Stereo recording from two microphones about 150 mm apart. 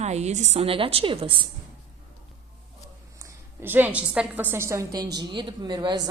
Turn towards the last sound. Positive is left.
turn(degrees=-30)  # may be behind; listen again after turning